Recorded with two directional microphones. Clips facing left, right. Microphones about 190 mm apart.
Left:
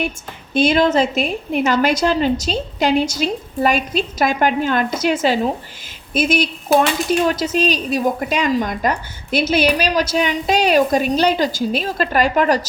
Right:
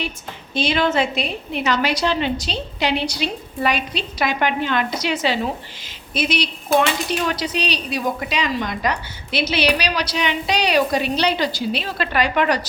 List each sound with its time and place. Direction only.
0.5 s a woman's voice: 50° left (ahead or behind)